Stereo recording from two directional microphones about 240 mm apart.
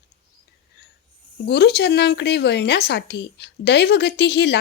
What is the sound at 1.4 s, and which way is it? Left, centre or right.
Speech, left.